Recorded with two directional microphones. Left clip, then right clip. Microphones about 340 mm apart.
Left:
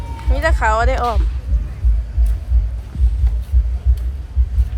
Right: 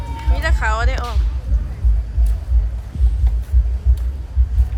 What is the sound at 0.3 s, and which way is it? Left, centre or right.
Speech, centre.